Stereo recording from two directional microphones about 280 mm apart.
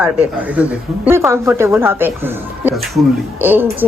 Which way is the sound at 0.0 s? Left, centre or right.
Centre.